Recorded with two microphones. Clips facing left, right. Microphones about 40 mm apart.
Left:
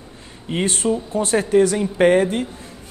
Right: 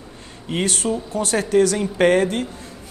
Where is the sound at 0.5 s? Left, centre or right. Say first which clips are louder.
Left 2 dB; left.